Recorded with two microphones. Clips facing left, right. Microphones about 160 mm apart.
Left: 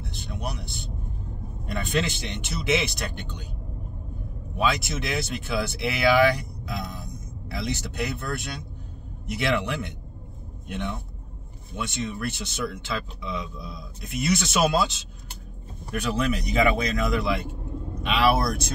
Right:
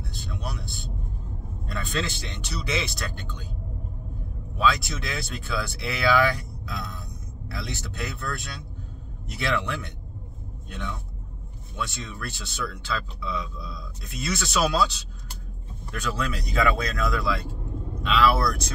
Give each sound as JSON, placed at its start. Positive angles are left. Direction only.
{"t": 0.0, "sound": "a sound", "side_deg": 20}
{"t": 1.7, "sound": "speech", "side_deg": 20}
{"t": 4.6, "sound": "speech", "side_deg": 20}